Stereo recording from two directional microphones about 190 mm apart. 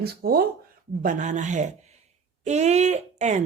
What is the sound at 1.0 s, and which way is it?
A woman's voice, 40° right (ahead or behind).